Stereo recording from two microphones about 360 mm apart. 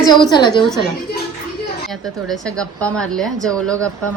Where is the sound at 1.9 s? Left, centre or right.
Centre.